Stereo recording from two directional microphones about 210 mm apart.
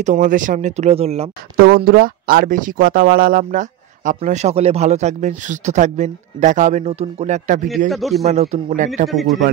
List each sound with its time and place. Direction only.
0.0 s speech: 35° right (ahead or behind)
1.9 s speech: 45° right (ahead or behind)
7.9 s a man's voice: centre (ahead or behind)
8.3 s speech: 30° right (ahead or behind)
9.1 s a man's voice: centre (ahead or behind)